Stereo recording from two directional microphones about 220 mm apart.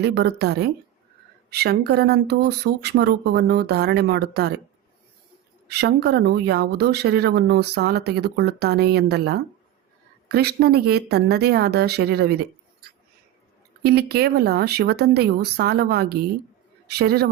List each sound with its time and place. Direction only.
0.0 s speech: 50° right (ahead or behind)
5.6 s speech: 50° right (ahead or behind)
13.8 s speech: 45° right (ahead or behind)